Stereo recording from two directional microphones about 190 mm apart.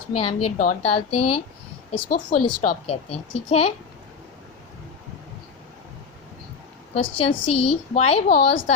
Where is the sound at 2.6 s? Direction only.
35° left (ahead or behind).